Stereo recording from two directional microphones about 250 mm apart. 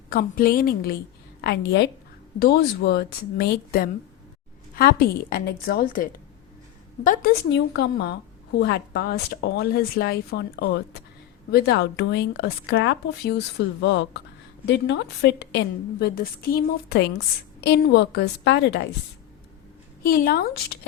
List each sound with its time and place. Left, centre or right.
0.1 s a woman's voice: left
20.1 s a woman's voice: left